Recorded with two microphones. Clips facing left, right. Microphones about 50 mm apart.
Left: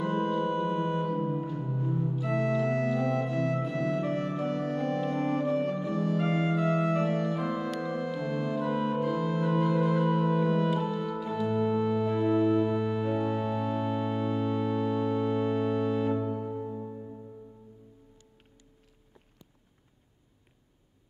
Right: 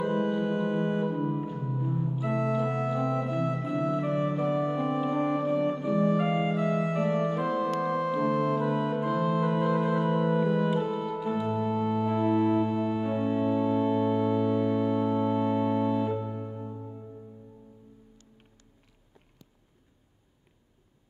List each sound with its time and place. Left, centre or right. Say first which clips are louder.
0.0 s organ: right 1 dB; centre
1.4 s music: even; centre
2.1 s organ: right 1 dB; centre
3.6 s music: right 1 dB; centre
6.9 s organ: even; centre
7.2 s organ: right 3 dB; centre
16.1 s music: left 2 dB; left